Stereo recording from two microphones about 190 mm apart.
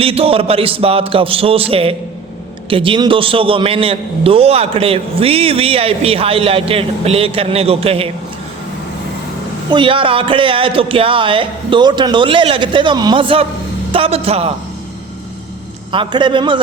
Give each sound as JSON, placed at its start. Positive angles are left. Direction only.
{"t": 0.0, "sound": "a man's voice", "side_deg": -30}
{"t": 9.7, "sound": "a man's voice", "side_deg": -25}
{"t": 15.9, "sound": "a man's voice", "side_deg": -25}